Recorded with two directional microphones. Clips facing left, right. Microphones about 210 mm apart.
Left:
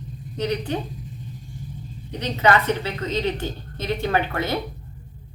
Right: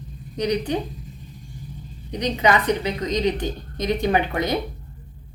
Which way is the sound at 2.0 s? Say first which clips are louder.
Even; 15° right (ahead or behind).